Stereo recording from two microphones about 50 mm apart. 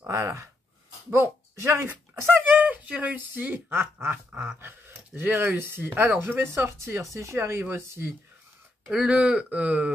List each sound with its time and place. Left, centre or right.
0.0 s speech: right
2.5 s speech: right
4.3 s speech: right
4.6 s speech: right
6.4 s speech: right
8.8 s speech: centre